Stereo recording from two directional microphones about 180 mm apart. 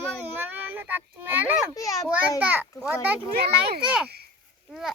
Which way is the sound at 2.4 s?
10° right (ahead or behind).